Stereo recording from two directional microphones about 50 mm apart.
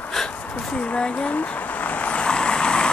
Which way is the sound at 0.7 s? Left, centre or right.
Left.